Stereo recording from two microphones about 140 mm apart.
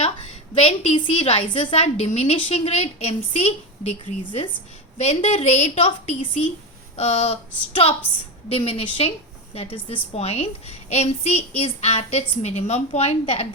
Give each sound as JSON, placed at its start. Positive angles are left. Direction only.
{"t": 0.6, "sound": "a woman's voice", "side_deg": 45}
{"t": 8.4, "sound": "a woman's voice", "side_deg": 45}